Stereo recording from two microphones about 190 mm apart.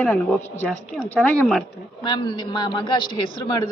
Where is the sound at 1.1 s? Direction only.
10° left (ahead or behind).